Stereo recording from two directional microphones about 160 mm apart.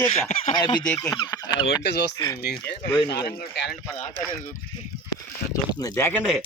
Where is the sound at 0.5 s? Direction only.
30° left (ahead or behind).